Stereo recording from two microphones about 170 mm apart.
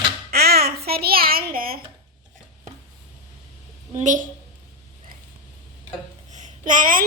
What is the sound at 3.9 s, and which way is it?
Speech, 50° right (ahead or behind).